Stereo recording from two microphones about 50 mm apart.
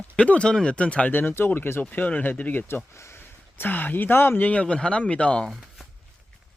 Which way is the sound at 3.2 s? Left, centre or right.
Left.